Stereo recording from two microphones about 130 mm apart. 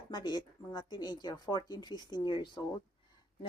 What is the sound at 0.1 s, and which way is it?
A woman's voice, 35° left (ahead or behind).